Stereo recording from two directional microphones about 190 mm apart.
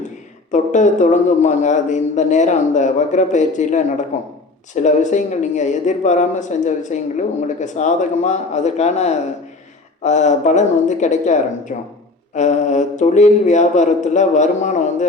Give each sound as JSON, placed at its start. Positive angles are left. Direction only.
{"t": 0.5, "sound": "speech", "side_deg": 40}